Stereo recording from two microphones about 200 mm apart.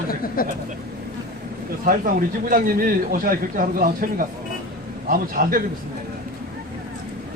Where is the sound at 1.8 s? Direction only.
45° right (ahead or behind).